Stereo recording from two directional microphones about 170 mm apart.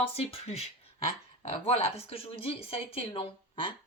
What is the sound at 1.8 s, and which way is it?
Speech, 35° left (ahead or behind).